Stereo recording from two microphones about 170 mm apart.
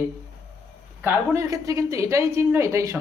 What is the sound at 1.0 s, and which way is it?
A woman's voice, 15° right (ahead or behind).